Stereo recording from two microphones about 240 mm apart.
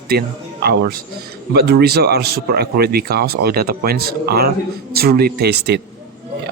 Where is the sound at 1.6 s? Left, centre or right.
Right.